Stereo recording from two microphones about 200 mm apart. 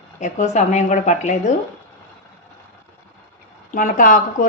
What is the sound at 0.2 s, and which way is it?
A woman's voice, 35° left (ahead or behind).